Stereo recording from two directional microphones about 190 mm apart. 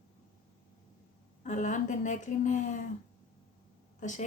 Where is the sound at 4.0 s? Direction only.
40° left (ahead or behind).